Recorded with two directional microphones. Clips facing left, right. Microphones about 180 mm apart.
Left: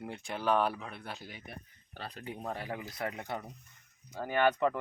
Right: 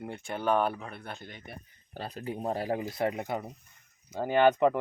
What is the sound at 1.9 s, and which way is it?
Speech, 30° right (ahead or behind).